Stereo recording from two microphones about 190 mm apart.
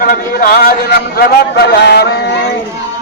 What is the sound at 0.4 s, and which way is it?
A man's voice, 50° left (ahead or behind).